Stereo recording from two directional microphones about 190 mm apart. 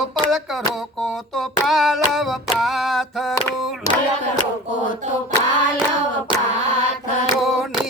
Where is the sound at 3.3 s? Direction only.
15° left (ahead or behind).